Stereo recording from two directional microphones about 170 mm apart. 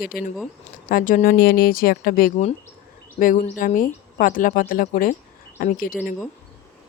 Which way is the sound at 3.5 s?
50° left (ahead or behind).